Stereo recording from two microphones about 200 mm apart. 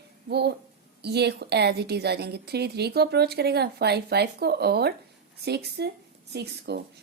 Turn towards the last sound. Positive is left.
turn(degrees=-55)  # may be behind; listen again after turning